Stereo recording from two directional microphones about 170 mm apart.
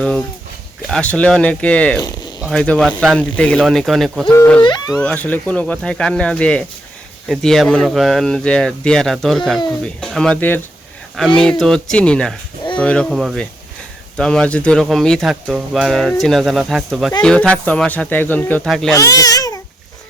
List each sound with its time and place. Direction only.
0.0 s speech: 5° left (ahead or behind)
4.6 s speech: 25° left (ahead or behind)
4.9 s speech: 5° left (ahead or behind)
18.9 s speech: 20° left (ahead or behind)